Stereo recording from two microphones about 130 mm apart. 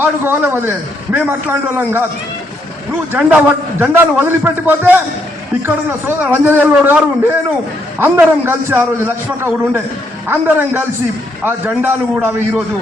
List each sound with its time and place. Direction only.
0.0 s a man's voice: 15° right (ahead or behind)
3.1 s a man's voice: 10° right (ahead or behind)